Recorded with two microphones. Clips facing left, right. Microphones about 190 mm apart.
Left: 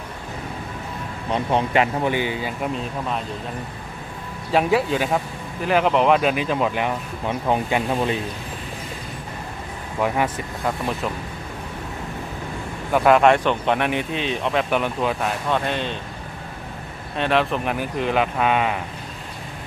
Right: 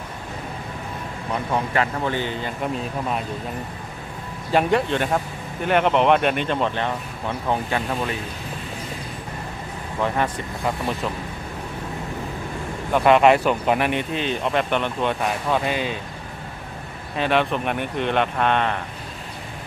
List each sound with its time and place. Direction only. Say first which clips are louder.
1.3 s speech: left 3 dB; 20° left (ahead or behind)
4.5 s speech: even; 5° left (ahead or behind)
10.0 s speech: left 1 dB; 10° left (ahead or behind)
12.9 s speech: even; centre (ahead or behind)
17.2 s speech: even; centre (ahead or behind)